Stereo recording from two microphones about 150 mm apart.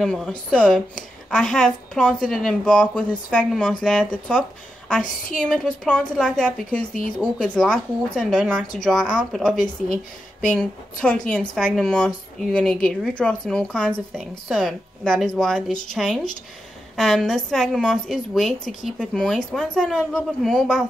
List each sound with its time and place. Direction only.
0.0 s a woman's voice: 5° left (ahead or behind)